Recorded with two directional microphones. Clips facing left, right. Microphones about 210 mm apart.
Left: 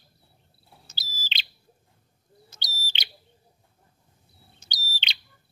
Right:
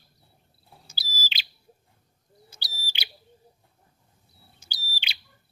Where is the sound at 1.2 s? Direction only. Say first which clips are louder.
Even; 10° right (ahead or behind).